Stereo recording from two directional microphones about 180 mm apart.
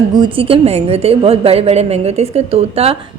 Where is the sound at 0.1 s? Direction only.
25° right (ahead or behind).